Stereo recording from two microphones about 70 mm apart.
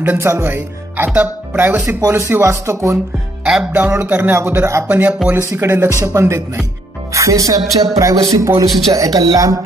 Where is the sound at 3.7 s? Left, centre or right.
Right.